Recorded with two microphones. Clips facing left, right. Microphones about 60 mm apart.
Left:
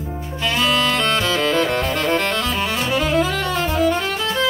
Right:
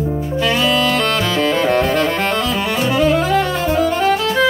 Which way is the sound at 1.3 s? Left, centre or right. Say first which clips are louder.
Right 3 dB; centre.